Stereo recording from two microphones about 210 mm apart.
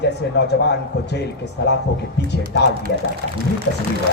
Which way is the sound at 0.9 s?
55° left (ahead or behind).